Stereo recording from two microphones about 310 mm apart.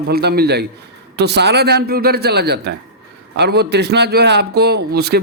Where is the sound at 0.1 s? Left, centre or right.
Right.